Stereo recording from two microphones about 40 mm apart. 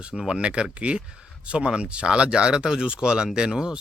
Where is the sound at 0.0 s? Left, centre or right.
Right.